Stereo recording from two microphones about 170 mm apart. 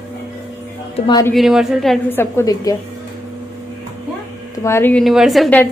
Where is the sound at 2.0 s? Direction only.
15° left (ahead or behind).